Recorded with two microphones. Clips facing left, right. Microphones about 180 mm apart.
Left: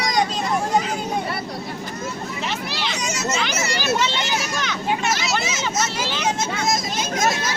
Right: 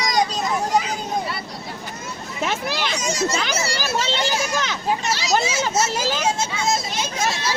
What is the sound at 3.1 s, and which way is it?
Children playing, 35° right (ahead or behind).